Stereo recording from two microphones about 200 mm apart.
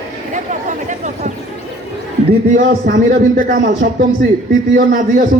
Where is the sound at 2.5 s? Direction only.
45° right (ahead or behind).